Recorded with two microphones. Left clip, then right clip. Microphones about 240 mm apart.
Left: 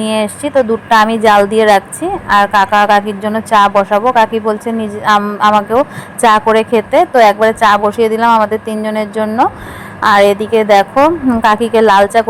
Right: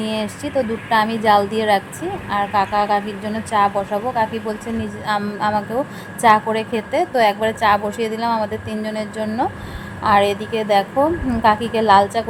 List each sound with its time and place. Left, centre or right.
0.0 s a woman's voice: left